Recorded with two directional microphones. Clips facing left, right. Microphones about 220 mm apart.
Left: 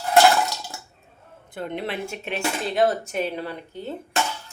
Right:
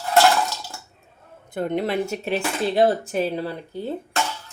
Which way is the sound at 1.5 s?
45° right (ahead or behind).